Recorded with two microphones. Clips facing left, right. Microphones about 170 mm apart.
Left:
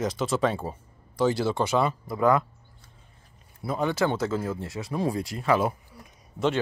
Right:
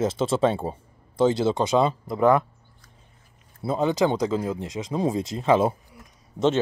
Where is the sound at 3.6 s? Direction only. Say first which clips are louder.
Right 4 dB; 20° right (ahead or behind).